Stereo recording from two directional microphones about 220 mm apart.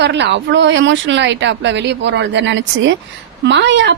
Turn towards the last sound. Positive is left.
turn(degrees=-55)  # may be behind; listen again after turning